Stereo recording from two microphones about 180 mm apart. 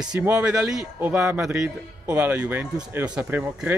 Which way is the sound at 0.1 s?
5° right (ahead or behind).